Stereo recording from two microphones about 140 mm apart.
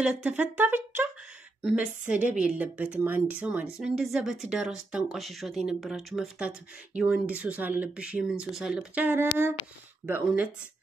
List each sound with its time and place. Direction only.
0.0 s a woman's voice: 10° right (ahead or behind)